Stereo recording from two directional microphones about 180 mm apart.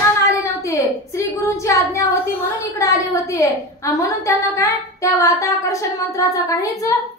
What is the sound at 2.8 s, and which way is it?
A woman's voice, 20° left (ahead or behind).